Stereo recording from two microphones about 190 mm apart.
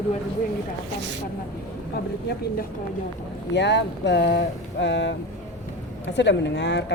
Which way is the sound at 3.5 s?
65° left (ahead or behind).